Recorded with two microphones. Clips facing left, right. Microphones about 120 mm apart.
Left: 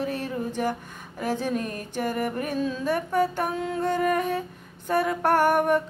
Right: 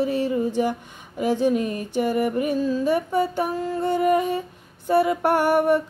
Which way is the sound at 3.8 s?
15° right (ahead or behind).